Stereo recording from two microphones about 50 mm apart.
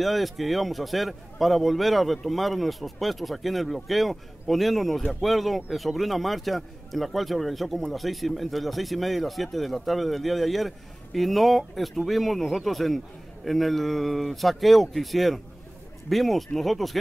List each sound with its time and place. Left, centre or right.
0.0 s a man's voice: centre